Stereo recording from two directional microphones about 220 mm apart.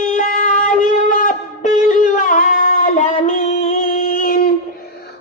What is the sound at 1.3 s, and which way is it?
Shofar, 35° left (ahead or behind).